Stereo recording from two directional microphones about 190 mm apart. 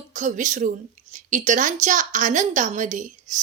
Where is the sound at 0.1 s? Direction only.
40° right (ahead or behind).